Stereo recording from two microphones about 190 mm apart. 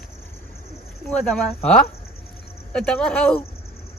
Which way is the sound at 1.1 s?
5° left (ahead or behind).